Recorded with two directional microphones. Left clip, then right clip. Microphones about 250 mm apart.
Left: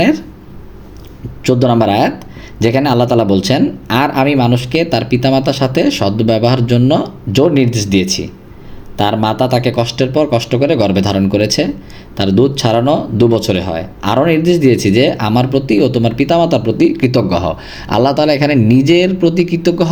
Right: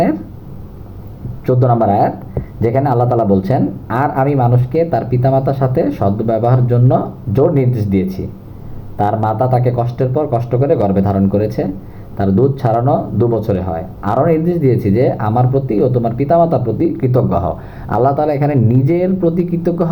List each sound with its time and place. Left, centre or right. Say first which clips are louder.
1.5 s speech: left 2 dB; left